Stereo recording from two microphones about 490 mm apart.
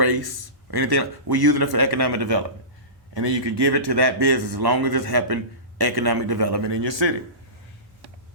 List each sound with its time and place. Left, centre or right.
0.0 s a man's voice: right